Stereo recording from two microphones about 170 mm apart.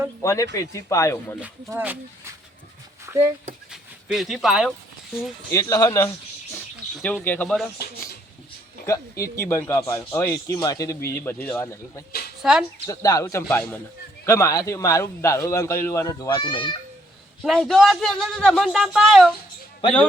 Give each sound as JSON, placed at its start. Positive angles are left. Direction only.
{"t": 0.2, "sound": "speech", "side_deg": 20}
{"t": 1.4, "sound": "speech", "side_deg": -15}
{"t": 3.7, "sound": "a sound", "side_deg": 0}
{"t": 5.5, "sound": "a man's voice", "side_deg": 20}
{"t": 7.0, "sound": "speech", "side_deg": 10}
{"t": 8.9, "sound": "speech", "side_deg": 15}
{"t": 12.4, "sound": "speech", "side_deg": -5}
{"t": 12.9, "sound": "a man's voice", "side_deg": 20}
{"t": 16.4, "sound": "a man's voice", "side_deg": 30}
{"t": 17.4, "sound": "speech", "side_deg": 0}